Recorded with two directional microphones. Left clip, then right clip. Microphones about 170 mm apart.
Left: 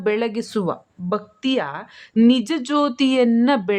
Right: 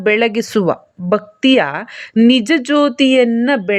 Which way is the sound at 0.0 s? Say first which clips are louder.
Right 8 dB; 20° right (ahead or behind).